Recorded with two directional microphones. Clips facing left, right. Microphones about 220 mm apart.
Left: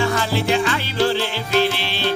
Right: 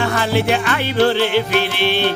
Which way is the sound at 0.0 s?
60° right (ahead or behind).